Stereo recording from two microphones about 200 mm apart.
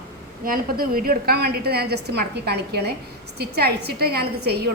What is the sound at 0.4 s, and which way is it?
A woman's voice, 45° right (ahead or behind).